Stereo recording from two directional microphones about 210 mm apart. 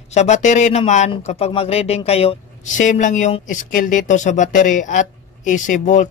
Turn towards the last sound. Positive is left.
turn(degrees=35)  # may be behind; listen again after turning